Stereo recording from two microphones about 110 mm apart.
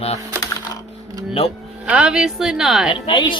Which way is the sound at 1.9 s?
10° right (ahead or behind).